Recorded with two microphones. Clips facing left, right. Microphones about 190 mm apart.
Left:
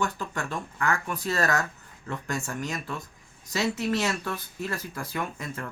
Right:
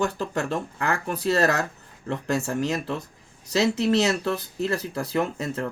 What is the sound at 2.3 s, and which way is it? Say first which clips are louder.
Speech: right 8 dB; 35° right (ahead or behind).